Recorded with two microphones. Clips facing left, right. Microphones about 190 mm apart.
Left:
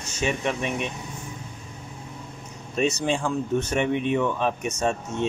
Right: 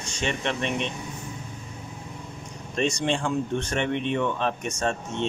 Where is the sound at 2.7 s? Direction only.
5° left (ahead or behind).